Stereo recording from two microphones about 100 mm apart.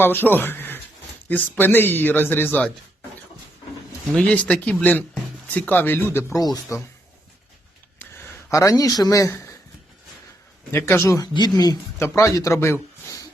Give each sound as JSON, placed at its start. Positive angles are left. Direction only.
{"t": 0.0, "sound": "speech", "side_deg": 20}
{"t": 4.1, "sound": "speech", "side_deg": 10}
{"t": 6.4, "sound": "speech", "side_deg": 40}
{"t": 7.9, "sound": "a sound", "side_deg": 25}
{"t": 10.7, "sound": "speech", "side_deg": 25}